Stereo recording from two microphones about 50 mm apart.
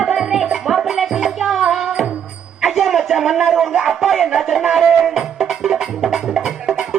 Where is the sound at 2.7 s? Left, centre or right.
Centre.